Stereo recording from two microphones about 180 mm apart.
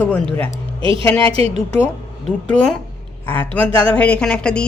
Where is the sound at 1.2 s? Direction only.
30° right (ahead or behind).